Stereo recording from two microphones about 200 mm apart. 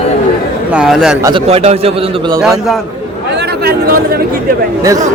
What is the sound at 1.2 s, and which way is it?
Speech, 25° right (ahead or behind).